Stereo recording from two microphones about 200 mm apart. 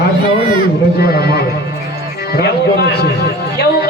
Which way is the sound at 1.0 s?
55° left (ahead or behind).